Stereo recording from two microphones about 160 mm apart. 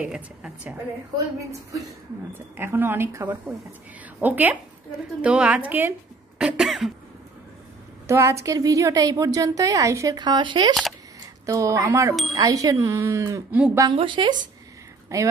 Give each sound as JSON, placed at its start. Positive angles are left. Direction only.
{"t": 0.0, "sound": "a woman's voice", "side_deg": -5}
{"t": 2.3, "sound": "a woman's voice", "side_deg": -15}
{"t": 8.1, "sound": "a woman's voice", "side_deg": -20}
{"t": 13.9, "sound": "speech", "side_deg": -30}
{"t": 15.1, "sound": "a woman's voice", "side_deg": -20}